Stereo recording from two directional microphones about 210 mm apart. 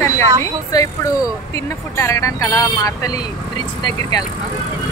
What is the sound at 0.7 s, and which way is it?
Speech, 15° left (ahead or behind).